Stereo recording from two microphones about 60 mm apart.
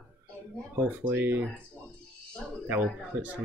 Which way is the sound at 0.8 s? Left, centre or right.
Right.